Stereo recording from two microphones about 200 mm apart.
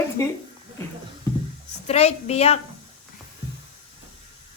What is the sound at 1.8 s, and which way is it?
Speech, 30° left (ahead or behind).